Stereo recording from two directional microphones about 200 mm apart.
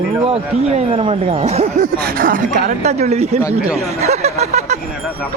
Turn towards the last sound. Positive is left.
turn(degrees=-35)  # may be behind; listen again after turning